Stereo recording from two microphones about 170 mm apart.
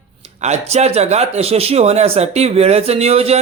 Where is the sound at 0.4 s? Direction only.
40° right (ahead or behind).